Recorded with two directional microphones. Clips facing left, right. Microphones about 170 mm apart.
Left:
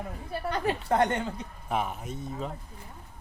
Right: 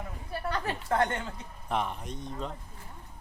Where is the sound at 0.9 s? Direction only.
20° left (ahead or behind).